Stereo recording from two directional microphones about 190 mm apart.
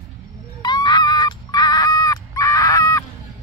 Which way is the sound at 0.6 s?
20° left (ahead or behind).